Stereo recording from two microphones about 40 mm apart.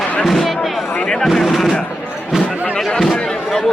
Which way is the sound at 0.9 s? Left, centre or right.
Centre.